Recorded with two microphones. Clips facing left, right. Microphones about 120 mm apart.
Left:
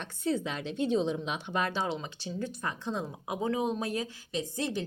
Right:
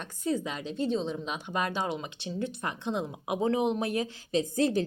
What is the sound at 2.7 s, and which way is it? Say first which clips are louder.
Speech: right 2 dB; 15° right (ahead or behind).